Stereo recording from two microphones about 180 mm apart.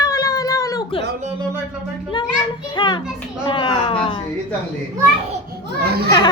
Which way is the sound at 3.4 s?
25° left (ahead or behind).